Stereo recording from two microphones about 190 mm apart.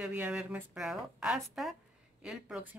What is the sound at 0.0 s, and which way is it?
Speech, 5° right (ahead or behind).